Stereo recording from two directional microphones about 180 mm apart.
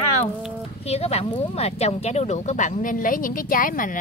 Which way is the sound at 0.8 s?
35° left (ahead or behind).